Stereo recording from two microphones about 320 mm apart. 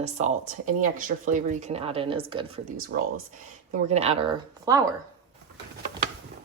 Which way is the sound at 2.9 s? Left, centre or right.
Right.